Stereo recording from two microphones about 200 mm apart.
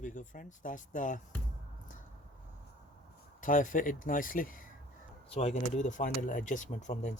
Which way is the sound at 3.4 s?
40° left (ahead or behind).